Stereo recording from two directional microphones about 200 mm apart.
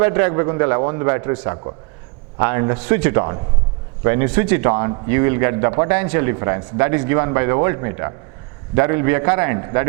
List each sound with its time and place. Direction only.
0.0 s speech: 15° right (ahead or behind)